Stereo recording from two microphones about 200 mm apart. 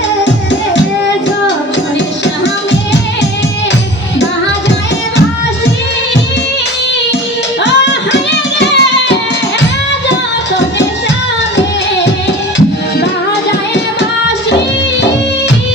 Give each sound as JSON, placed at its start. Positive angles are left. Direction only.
{"t": 8.1, "sound": "music", "side_deg": 60}